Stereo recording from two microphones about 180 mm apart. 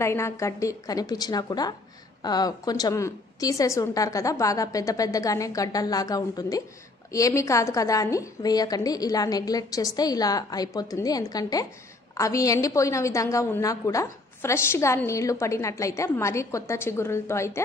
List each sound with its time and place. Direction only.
0.0 s a woman's voice: 15° left (ahead or behind)